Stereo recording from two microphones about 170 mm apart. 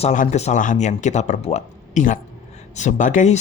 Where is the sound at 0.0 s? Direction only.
45° left (ahead or behind).